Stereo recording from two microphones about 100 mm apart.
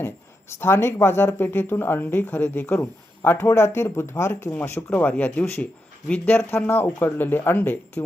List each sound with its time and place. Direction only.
0.5 s speech: 25° left (ahead or behind)
4.9 s speech: 15° left (ahead or behind)